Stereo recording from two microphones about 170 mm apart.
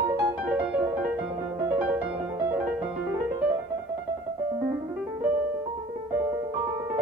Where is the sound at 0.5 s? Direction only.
10° right (ahead or behind).